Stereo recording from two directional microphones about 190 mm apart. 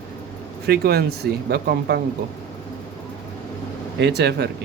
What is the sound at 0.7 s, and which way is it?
Speech, 60° right (ahead or behind).